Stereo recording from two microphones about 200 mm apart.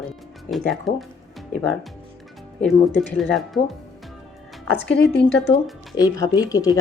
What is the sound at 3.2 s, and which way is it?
Speech, centre (ahead or behind).